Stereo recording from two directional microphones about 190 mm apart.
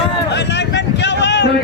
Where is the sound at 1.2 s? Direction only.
65° left (ahead or behind).